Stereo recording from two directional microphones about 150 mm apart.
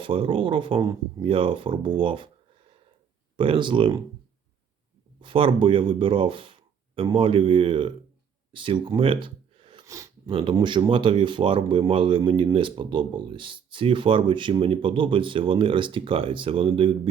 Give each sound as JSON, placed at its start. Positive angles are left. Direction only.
{"t": 0.0, "sound": "speech", "side_deg": -35}
{"t": 3.3, "sound": "speech", "side_deg": -35}
{"t": 5.2, "sound": "speech", "side_deg": -35}
{"t": 9.2, "sound": "a sound", "side_deg": -35}
{"t": 9.8, "sound": "a sound", "side_deg": -20}
{"t": 10.2, "sound": "speech", "side_deg": -35}